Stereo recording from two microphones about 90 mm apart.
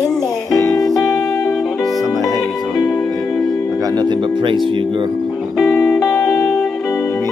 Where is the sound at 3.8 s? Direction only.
50° right (ahead or behind); by 4.6 s 65° right (ahead or behind).